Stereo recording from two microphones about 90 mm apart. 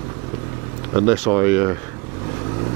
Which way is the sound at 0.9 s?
25° right (ahead or behind).